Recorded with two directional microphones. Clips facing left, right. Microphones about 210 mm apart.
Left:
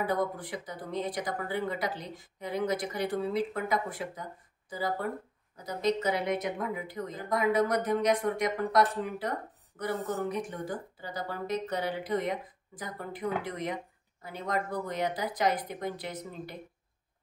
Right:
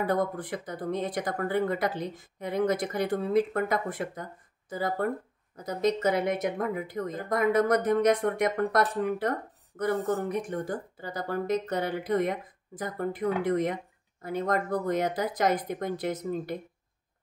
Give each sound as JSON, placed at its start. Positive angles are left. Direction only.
{"t": 0.0, "sound": "speech", "side_deg": -50}